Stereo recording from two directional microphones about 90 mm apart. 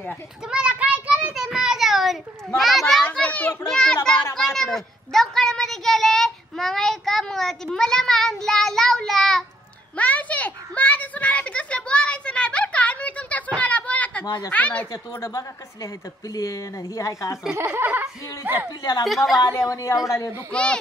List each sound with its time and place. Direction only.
0.5 s child singing: 10° right (ahead or behind)
1.3 s children playing: 5° right (ahead or behind)
3.1 s children playing: 15° left (ahead or behind)
3.6 s a child's voice: 10° left (ahead or behind)
9.9 s a sound: 15° left (ahead or behind)
13.6 s children playing: 15° left (ahead or behind)
14.2 s speech: 50° left (ahead or behind)
14.5 s speech: 15° left (ahead or behind)
14.9 s speech: 40° left (ahead or behind)
17.6 s speech: 25° right (ahead or behind)
18.7 s speech: 50° left (ahead or behind)
19.0 s a child's voice: centre (ahead or behind)
19.3 s speech: 45° left (ahead or behind)
20.5 s speech: 10° left (ahead or behind)